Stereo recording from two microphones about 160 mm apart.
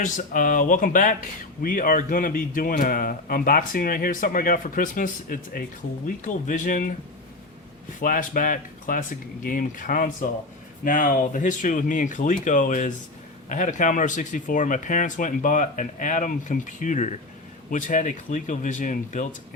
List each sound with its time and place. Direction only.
0.0 s speech: 55° left (ahead or behind)
8.0 s speech: 55° left (ahead or behind)